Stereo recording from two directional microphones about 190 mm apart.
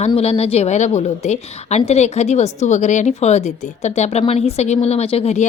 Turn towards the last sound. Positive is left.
turn(degrees=35)  # may be behind; listen again after turning